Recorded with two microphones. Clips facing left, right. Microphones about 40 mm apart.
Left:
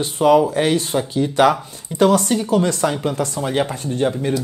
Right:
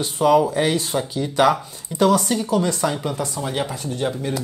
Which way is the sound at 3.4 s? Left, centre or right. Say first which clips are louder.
Left 4 dB; left.